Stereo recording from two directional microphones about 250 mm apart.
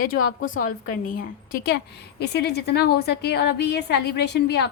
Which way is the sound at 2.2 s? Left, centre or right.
Left.